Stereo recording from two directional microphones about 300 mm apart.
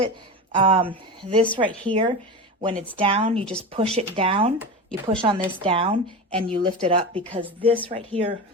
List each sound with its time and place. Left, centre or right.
0.5 s speech: centre
4.5 s a sound: centre
5.0 s speech: centre